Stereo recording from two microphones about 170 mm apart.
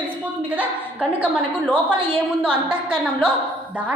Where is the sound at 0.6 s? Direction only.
10° right (ahead or behind).